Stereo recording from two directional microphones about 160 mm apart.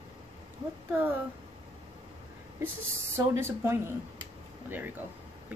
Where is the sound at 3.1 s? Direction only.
15° right (ahead or behind).